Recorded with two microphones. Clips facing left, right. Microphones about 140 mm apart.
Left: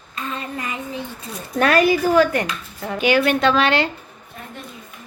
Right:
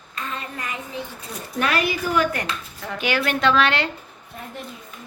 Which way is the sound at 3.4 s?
30° left (ahead or behind).